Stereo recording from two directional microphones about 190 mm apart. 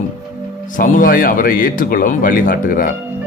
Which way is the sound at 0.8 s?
45° left (ahead or behind).